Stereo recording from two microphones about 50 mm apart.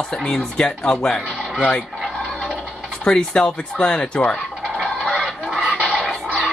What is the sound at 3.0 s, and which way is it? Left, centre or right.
Speech, centre.